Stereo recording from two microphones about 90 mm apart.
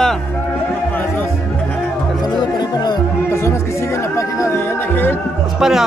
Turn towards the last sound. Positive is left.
turn(degrees=-5)  # may be behind; listen again after turning